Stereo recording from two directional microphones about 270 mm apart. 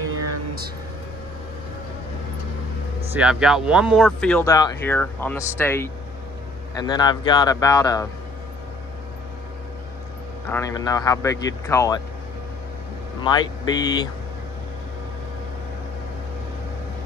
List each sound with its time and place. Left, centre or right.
3.1 s speech: centre
10.5 s speech: centre
13.2 s speech: centre